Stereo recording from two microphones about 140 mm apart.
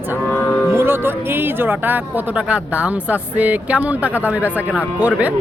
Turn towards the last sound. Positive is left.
turn(degrees=-10)  # may be behind; listen again after turning